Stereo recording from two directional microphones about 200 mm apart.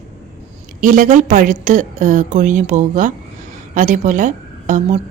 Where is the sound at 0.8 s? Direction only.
40° right (ahead or behind).